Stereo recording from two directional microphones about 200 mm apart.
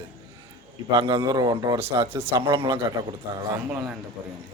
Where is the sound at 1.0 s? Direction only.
15° right (ahead or behind).